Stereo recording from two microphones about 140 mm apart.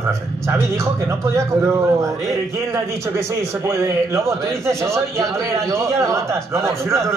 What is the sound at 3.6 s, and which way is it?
A man's voice, 20° right (ahead or behind).